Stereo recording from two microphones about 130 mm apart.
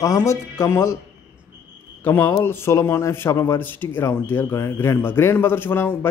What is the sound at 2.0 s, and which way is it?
Speech, 15° left (ahead or behind).